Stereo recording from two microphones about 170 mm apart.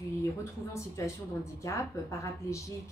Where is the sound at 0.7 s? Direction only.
15° left (ahead or behind).